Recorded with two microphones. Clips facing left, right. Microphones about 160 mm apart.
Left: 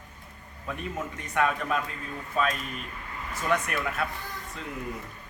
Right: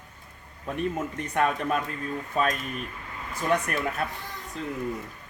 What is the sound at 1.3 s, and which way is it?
Speech, 40° right (ahead or behind).